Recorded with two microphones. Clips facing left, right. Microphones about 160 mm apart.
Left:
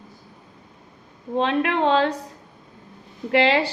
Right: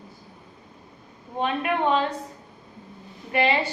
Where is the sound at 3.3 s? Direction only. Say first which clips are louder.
Left 4 dB; 90° left.